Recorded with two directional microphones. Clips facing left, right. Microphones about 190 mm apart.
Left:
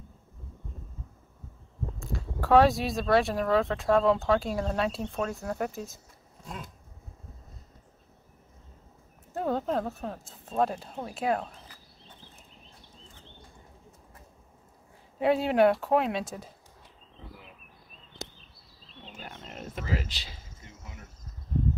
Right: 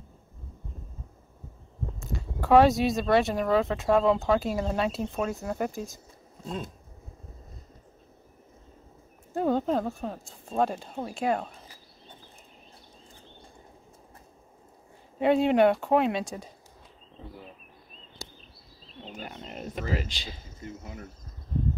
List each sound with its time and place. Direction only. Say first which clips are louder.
2.0 s speech: even; centre (ahead or behind)
6.4 s a sound: right 7 dB; 30° right (ahead or behind)
9.3 s speech: right 3 dB; centre (ahead or behind)
15.1 s speech: right 2 dB; centre (ahead or behind)
19.2 s a sound: right 2 dB; 5° right (ahead or behind)
20.0 s speech: right 4 dB; 5° left (ahead or behind)